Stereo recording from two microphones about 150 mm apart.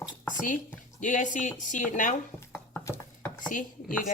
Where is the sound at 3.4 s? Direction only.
60° left (ahead or behind).